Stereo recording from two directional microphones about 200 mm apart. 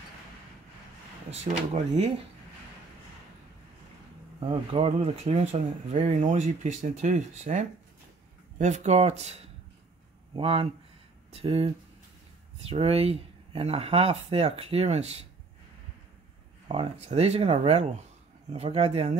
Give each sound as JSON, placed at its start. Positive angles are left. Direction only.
{"t": 1.4, "sound": "speech", "side_deg": -30}
{"t": 4.5, "sound": "speech", "side_deg": -25}
{"t": 16.6, "sound": "speech", "side_deg": -30}